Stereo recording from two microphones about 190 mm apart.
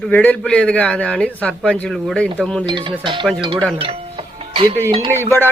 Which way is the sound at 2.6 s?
25° right (ahead or behind).